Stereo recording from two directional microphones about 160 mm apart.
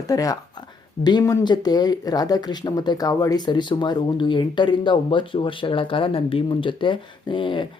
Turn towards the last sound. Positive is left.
turn(degrees=30)  # may be behind; listen again after turning